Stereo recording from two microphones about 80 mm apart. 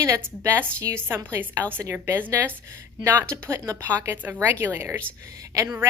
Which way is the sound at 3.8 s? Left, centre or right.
Right.